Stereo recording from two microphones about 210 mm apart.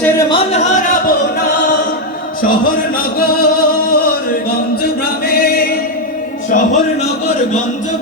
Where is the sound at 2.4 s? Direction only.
40° left (ahead or behind).